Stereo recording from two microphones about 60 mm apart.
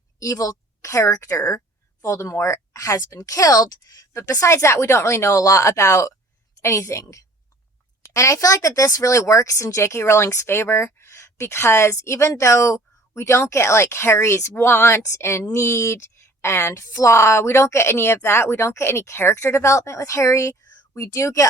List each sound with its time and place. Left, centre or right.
0.2 s a woman's voice: left
4.3 s a woman's voice: left
5.4 s a woman's voice: left
7.0 s a woman's voice: left
8.0 s a woman's voice: left
15.0 s a woman's voice: left